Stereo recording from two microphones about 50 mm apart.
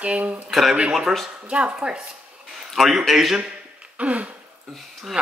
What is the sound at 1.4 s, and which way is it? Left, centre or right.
Speech, right.